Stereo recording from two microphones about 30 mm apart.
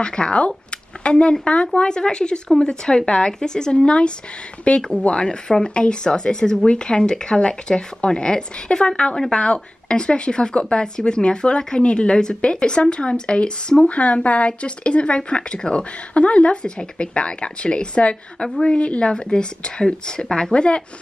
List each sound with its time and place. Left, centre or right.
0.0 s a woman's voice: left
3.7 s a woman's voice: left
12.5 s speech: left
16.1 s speech: left
16.6 s a woman's voice: left
20.5 s speech: left